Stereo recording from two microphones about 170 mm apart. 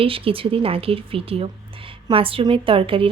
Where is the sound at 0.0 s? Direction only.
35° right (ahead or behind).